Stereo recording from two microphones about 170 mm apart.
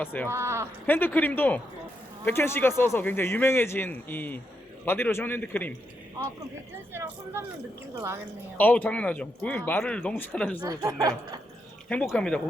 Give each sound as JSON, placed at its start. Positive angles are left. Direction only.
{"t": 0.0, "sound": "a man's voice", "side_deg": 10}
{"t": 0.3, "sound": "speech", "side_deg": -15}
{"t": 0.9, "sound": "a man's voice", "side_deg": 10}
{"t": 6.9, "sound": "speech", "side_deg": -15}
{"t": 8.5, "sound": "a man's voice", "side_deg": 10}
{"t": 10.6, "sound": "speech", "side_deg": -20}
{"t": 11.9, "sound": "a man's voice", "side_deg": 10}